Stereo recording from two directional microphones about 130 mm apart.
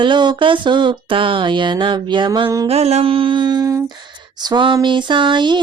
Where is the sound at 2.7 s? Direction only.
55° right (ahead or behind).